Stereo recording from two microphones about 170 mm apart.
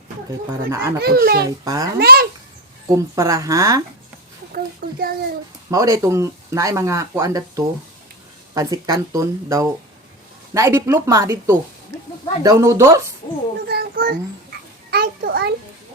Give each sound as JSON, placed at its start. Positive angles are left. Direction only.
{"t": 0.3, "sound": "speech", "side_deg": -15}
{"t": 0.9, "sound": "a child's voice", "side_deg": -65}
{"t": 1.5, "sound": "speech", "side_deg": -20}
{"t": 2.0, "sound": "speech", "side_deg": -65}
{"t": 2.9, "sound": "speech", "side_deg": -20}
{"t": 4.5, "sound": "speech", "side_deg": -60}
{"t": 5.7, "sound": "speech", "side_deg": -20}
{"t": 13.7, "sound": "a child's voice", "side_deg": -65}